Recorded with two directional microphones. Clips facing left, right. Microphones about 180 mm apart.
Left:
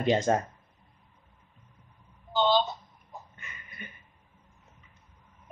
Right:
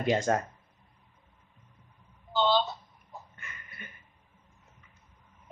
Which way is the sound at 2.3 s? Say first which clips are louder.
Left 1 dB; 15° left (ahead or behind).